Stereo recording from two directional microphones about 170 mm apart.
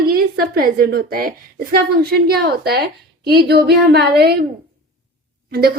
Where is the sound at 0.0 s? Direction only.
60° right (ahead or behind).